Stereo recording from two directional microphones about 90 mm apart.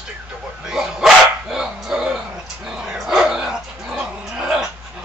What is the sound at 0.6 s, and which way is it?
Speech, 5° right (ahead or behind).